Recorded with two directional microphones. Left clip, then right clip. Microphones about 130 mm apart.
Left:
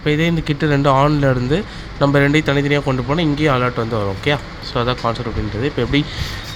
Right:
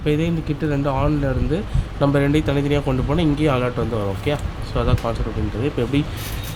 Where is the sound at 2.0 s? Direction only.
10° left (ahead or behind).